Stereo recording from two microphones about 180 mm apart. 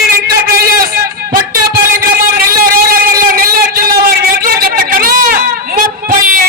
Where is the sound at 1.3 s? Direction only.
55° right (ahead or behind).